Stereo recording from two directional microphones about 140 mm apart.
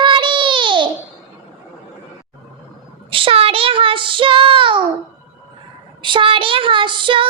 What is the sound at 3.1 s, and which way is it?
Child singing, 40° right (ahead or behind).